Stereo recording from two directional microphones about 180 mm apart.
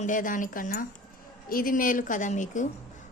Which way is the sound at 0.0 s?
45° left (ahead or behind).